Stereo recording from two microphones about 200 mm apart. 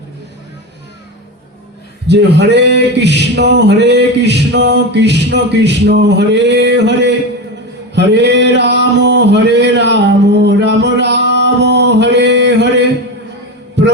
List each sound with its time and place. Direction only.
2.0 s speech: 60° right (ahead or behind)
7.9 s male singing: 60° right (ahead or behind)
13.8 s a sound: 60° right (ahead or behind)